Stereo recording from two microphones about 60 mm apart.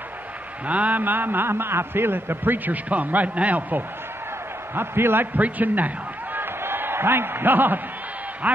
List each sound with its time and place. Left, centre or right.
0.7 s a man's voice: right
4.7 s a man's voice: right
6.3 s a sound: right
8.4 s a man's voice: right